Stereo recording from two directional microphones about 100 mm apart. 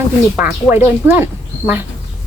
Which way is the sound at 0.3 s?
20° right (ahead or behind).